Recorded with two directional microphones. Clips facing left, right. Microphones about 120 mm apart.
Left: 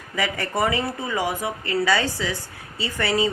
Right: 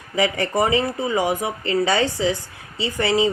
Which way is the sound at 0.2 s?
20° right (ahead or behind).